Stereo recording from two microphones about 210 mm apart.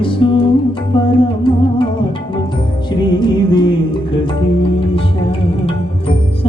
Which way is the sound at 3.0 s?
20° left (ahead or behind).